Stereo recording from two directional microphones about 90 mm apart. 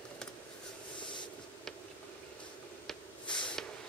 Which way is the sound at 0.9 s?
60° left (ahead or behind).